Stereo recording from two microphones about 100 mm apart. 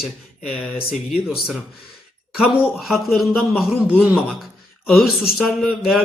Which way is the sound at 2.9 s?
Centre (ahead or behind).